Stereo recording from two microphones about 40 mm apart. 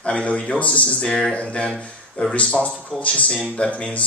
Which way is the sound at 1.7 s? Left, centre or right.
Centre.